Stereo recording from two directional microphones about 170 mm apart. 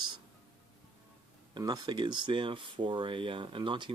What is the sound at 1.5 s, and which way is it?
Speech, 25° right (ahead or behind).